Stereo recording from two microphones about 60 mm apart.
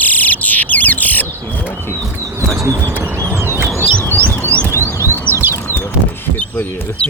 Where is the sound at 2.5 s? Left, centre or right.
Right.